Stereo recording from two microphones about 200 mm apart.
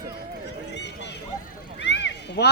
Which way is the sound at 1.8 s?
60° left (ahead or behind).